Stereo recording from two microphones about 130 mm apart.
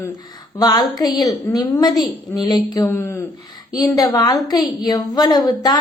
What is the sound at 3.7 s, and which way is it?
A woman's voice, 30° left (ahead or behind).